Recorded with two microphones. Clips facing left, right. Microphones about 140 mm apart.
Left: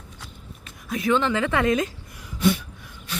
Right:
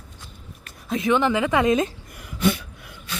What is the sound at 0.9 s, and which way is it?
A woman's voice, 20° right (ahead or behind).